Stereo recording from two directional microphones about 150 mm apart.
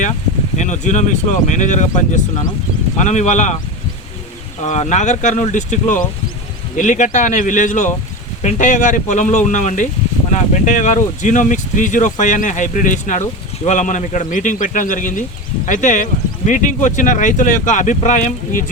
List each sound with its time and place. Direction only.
0.5 s speech: 55° left (ahead or behind)
3.0 s speech: 55° left (ahead or behind)
4.6 s speech: 50° left (ahead or behind)